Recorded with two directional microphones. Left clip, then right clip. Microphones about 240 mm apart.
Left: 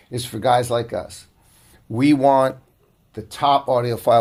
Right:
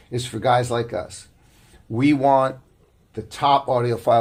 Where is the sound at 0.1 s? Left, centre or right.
Left.